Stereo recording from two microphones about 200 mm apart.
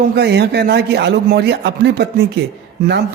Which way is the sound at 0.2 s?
55° right (ahead or behind).